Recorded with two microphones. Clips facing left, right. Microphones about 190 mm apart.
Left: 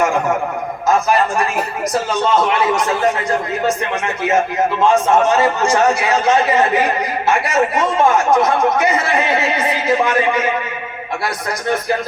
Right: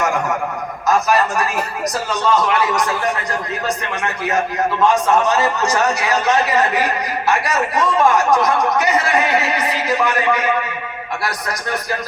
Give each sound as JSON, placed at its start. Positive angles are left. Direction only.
{"t": 0.9, "sound": "a man's voice", "side_deg": 25}